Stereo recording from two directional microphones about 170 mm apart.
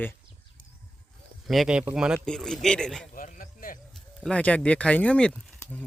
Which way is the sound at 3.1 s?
55° left (ahead or behind).